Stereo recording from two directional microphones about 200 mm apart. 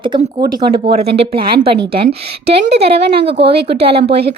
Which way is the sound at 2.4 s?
55° right (ahead or behind).